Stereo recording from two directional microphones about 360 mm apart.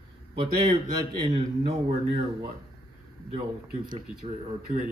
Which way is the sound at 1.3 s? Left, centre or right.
Centre.